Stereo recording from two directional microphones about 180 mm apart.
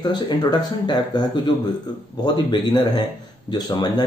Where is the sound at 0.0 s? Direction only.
25° left (ahead or behind).